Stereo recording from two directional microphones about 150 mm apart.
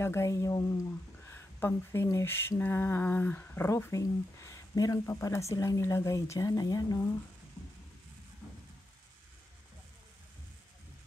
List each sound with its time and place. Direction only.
0.0 s speech: 20° left (ahead or behind)